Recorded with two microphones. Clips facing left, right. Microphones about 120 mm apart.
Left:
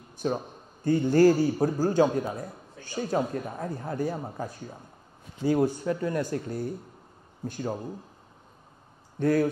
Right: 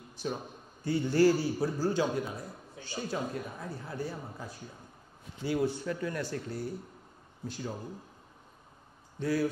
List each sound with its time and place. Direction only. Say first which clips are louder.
0.2 s a man's voice: left 7 dB; 45° left (ahead or behind)
9.2 s a man's voice: left 6 dB; 55° left (ahead or behind)